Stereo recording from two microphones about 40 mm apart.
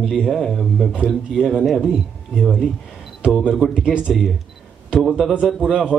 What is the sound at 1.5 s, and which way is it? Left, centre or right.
Speech, centre.